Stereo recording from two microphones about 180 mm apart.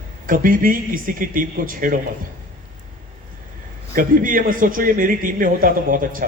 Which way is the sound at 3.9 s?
50° right (ahead or behind).